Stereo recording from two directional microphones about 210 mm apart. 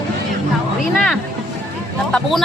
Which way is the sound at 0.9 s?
Centre (ahead or behind).